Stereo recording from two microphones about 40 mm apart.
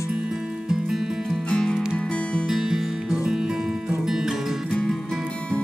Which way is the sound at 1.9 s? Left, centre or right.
Left.